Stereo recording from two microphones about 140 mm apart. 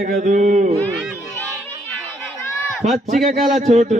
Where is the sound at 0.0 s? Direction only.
75° right (ahead or behind); by 0.7 s 60° right (ahead or behind).